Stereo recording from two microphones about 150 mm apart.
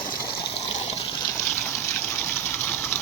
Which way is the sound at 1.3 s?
20° left (ahead or behind).